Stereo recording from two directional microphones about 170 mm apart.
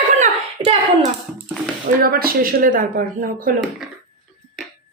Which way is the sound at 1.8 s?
60° right (ahead or behind).